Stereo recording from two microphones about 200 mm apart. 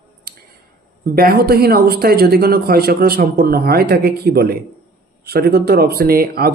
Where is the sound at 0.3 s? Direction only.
50° right (ahead or behind).